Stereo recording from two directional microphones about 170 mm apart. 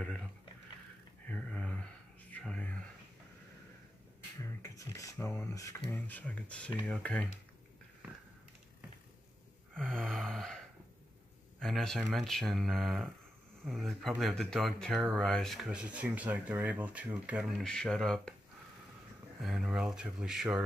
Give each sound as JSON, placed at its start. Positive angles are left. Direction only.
{"t": 1.3, "sound": "a sound", "side_deg": 5}
{"t": 4.6, "sound": "beatboxing", "side_deg": 20}
{"t": 5.2, "sound": "speech", "side_deg": 15}
{"t": 9.8, "sound": "gasp", "side_deg": 5}
{"t": 11.6, "sound": "speech", "side_deg": 0}
{"t": 19.4, "sound": "speech", "side_deg": 0}